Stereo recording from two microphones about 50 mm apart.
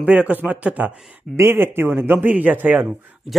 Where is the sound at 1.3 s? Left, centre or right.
Right.